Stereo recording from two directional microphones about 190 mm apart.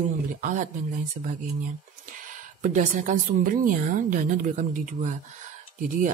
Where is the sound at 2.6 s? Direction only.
40° right (ahead or behind).